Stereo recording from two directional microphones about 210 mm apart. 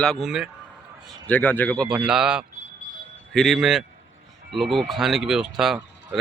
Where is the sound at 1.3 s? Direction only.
10° left (ahead or behind).